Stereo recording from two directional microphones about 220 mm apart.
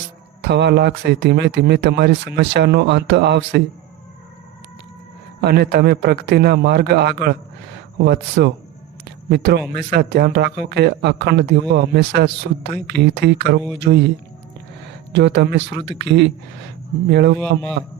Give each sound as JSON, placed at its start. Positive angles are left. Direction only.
{"t": 0.4, "sound": "speech", "side_deg": -50}
{"t": 5.4, "sound": "speech", "side_deg": -45}
{"t": 15.1, "sound": "speech", "side_deg": -50}